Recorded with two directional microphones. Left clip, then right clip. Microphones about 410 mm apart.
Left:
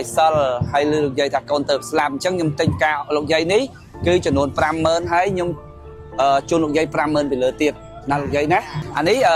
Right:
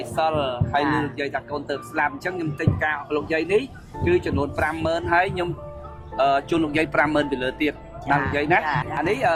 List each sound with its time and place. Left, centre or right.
0.2 s speech: left